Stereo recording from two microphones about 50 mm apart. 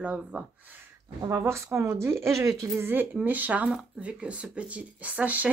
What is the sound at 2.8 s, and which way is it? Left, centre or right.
Speech, right.